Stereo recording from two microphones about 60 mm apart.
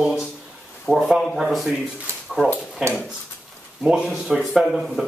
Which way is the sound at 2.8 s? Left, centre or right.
Centre.